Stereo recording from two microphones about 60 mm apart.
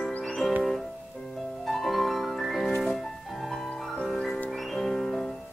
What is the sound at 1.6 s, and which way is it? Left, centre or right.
Music, centre.